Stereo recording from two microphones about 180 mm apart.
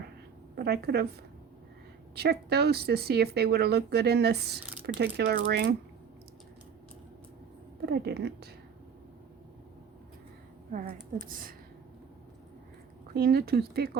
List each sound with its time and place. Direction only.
0.5 s speech: 65° right (ahead or behind)
2.1 s speech: 65° right (ahead or behind)
7.9 s speech: 65° right (ahead or behind)
10.7 s a woman's voice: 50° right (ahead or behind)
13.1 s speech: 55° right (ahead or behind)